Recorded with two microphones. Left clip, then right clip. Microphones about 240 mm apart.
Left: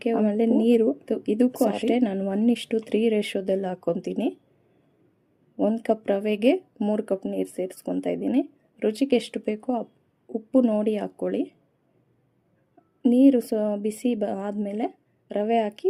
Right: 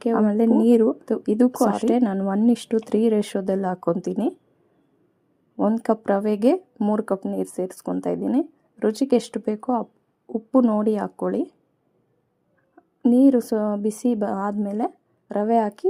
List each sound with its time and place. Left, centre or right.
0.0 s speech: right
5.5 s a woman's voice: right
13.0 s speech: right